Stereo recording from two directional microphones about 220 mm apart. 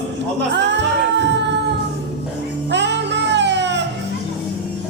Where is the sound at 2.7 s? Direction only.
50° right (ahead or behind).